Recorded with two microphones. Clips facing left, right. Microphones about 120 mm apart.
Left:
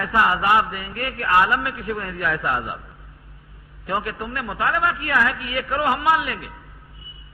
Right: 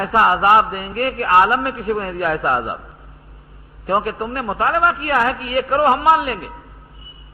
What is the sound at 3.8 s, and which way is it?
A man's voice, 40° right (ahead or behind).